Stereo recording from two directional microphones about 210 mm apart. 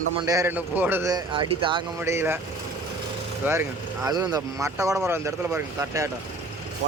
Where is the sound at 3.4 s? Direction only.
10° right (ahead or behind).